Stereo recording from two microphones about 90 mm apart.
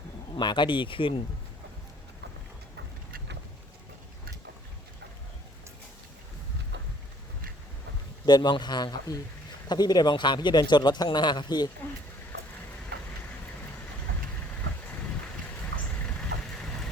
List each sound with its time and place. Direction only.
0.3 s speech: 60° left (ahead or behind); by 1.2 s 75° left (ahead or behind)
8.3 s speech: 55° left (ahead or behind)